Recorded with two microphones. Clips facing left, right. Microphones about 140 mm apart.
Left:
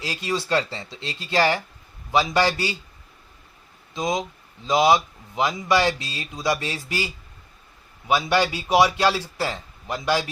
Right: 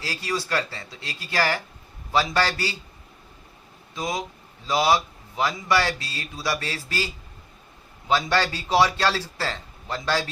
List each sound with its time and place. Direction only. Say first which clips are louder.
0.0 s a man's voice: left 2 dB; 20° left (ahead or behind)
3.9 s a man's voice: left 4 dB; 20° left (ahead or behind)